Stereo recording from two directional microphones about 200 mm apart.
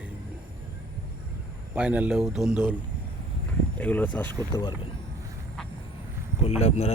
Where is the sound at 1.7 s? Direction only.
5° right (ahead or behind).